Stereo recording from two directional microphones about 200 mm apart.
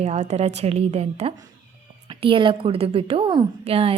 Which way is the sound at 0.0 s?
35° right (ahead or behind).